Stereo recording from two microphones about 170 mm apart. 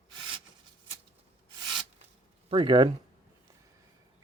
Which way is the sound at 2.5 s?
30° right (ahead or behind).